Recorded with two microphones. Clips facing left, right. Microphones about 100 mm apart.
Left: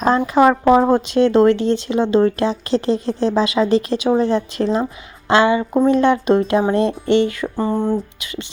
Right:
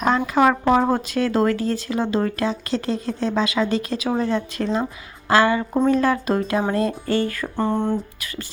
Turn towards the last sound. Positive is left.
turn(degrees=10)  # may be behind; listen again after turning